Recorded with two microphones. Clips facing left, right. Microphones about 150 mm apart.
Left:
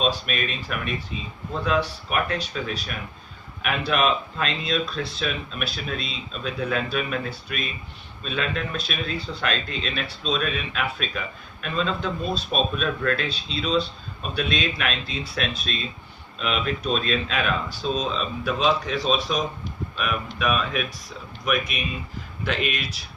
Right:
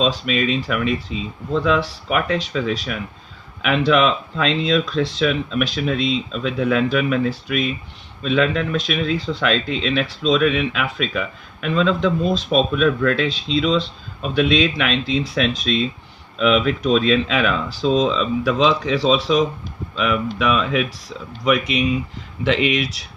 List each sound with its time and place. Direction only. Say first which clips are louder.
0.0 s speech: right 6 dB; 90° right